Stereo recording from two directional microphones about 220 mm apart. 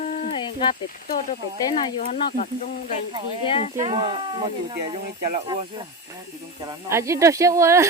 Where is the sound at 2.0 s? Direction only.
35° left (ahead or behind).